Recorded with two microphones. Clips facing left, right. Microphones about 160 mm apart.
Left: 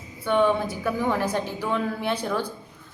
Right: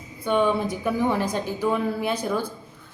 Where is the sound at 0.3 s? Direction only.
15° right (ahead or behind).